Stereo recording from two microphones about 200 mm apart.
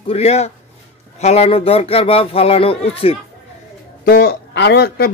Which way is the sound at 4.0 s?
50° left (ahead or behind).